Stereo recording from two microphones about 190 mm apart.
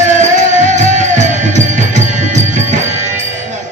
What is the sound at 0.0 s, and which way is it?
Music, 40° right (ahead or behind).